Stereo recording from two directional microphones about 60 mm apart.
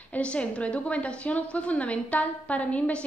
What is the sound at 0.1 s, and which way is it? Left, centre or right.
A woman's voice, centre.